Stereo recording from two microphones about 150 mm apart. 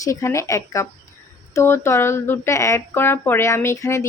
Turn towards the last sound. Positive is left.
turn(degrees=20)  # may be behind; listen again after turning